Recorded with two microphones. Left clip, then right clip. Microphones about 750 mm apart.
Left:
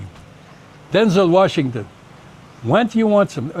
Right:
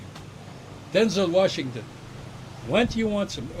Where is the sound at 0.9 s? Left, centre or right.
Left.